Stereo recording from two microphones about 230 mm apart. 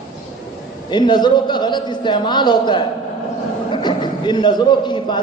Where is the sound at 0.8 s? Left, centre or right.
Centre.